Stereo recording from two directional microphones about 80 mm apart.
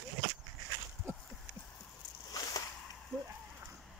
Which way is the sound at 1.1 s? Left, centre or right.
Right.